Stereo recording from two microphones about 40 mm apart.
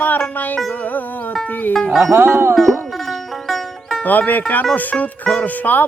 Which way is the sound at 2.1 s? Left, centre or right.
Right.